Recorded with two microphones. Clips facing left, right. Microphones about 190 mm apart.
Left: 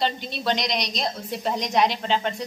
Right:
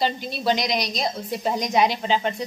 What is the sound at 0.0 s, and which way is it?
A woman's voice, centre (ahead or behind).